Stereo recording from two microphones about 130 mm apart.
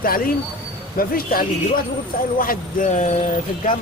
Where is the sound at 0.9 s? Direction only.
90° left; by 3.1 s 70° left (ahead or behind).